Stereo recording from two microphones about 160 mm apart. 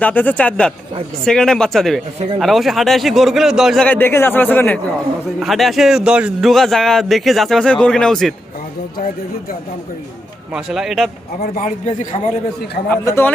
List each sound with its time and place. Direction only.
0.0 s a man's voice: 10° left (ahead or behind)
3.8 s speech: 10° left (ahead or behind)
5.4 s a man's voice: centre (ahead or behind)
10.5 s a man's voice: centre (ahead or behind)
11.4 s a man's voice: 55° left (ahead or behind)
12.9 s speech: 15° left (ahead or behind)